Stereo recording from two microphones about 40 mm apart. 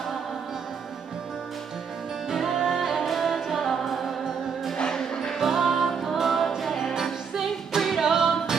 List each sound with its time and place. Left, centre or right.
2.2 s music: centre
4.7 s music: centre
5.4 s music: centre